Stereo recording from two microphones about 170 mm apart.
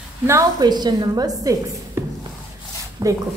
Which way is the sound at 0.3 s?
20° right (ahead or behind).